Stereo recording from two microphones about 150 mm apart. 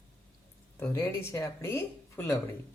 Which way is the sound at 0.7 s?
15° left (ahead or behind).